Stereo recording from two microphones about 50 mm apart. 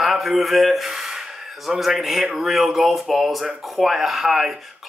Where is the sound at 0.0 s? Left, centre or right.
Centre.